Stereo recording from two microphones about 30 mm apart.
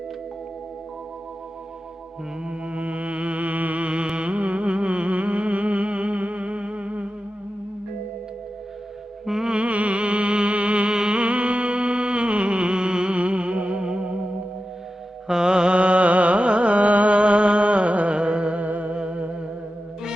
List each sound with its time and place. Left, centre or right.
2.5 s music: right
4.1 s a sound: right
9.2 s music: centre
9.6 s music: right
10.8 s music: right
13.1 s music: right
13.8 s music: right
15.3 s carnatic music: right
17.2 s music: right
18.6 s music: right
18.9 s music: right